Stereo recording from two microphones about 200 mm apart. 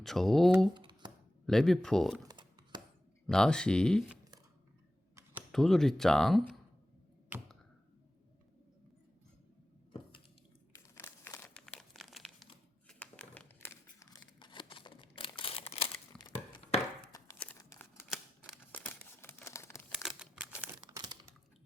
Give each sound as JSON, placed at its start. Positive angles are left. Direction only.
{"t": 0.0, "sound": "speech", "side_deg": 0}
{"t": 0.7, "sound": "a sound", "side_deg": -20}
{"t": 1.5, "sound": "speech", "side_deg": 0}
{"t": 2.2, "sound": "computer keyboard", "side_deg": -20}
{"t": 3.2, "sound": "speech", "side_deg": 5}
{"t": 5.5, "sound": "speech", "side_deg": 0}
{"t": 7.3, "sound": "a sound", "side_deg": -10}
{"t": 10.9, "sound": "crumpling", "side_deg": 10}
{"t": 14.3, "sound": "crumpling", "side_deg": 25}
{"t": 16.5, "sound": "a sound", "side_deg": 20}
{"t": 17.3, "sound": "crumpling", "side_deg": 5}
{"t": 17.6, "sound": "scissors", "side_deg": 15}
{"t": 18.1, "sound": "scissors", "side_deg": 0}
{"t": 20.0, "sound": "crumpling", "side_deg": -5}